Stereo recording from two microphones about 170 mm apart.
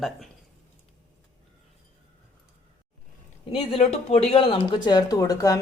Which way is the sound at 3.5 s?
35° left (ahead or behind).